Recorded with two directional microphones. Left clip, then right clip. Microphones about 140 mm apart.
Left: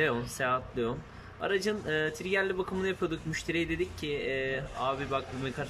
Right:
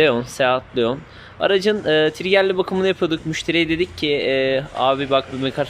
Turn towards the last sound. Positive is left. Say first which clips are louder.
# right 14 dB
turn(degrees=-25)  # may be behind; listen again after turning